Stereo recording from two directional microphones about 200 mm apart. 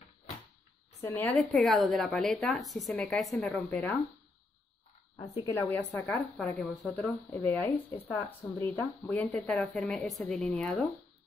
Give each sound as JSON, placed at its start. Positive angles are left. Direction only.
{"t": 1.0, "sound": "a woman's voice", "side_deg": 10}
{"t": 5.1, "sound": "a woman's voice", "side_deg": 20}
{"t": 5.7, "sound": "a woman's voice", "side_deg": 5}